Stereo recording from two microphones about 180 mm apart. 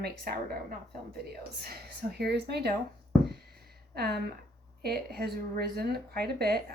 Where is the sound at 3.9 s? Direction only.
60° right (ahead or behind).